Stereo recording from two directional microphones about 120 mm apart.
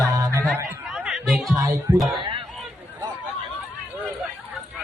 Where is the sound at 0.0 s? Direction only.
30° right (ahead or behind).